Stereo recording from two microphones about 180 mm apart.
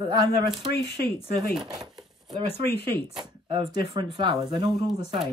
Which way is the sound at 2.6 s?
65° left (ahead or behind).